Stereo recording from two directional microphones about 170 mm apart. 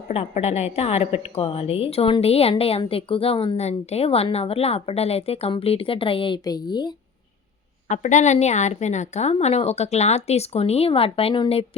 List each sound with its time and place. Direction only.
0.1 s a woman's voice: 40° left (ahead or behind); by 6.9 s 25° left (ahead or behind)
7.9 s a woman's voice: 45° left (ahead or behind)